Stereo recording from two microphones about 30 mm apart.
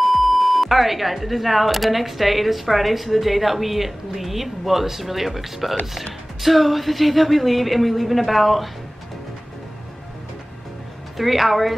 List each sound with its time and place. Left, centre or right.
0.0 s speech: centre
11.1 s speech: centre